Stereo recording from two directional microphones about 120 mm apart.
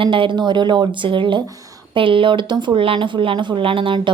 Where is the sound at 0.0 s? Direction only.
45° right (ahead or behind).